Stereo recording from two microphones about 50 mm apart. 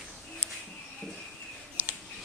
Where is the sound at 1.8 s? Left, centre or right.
Right.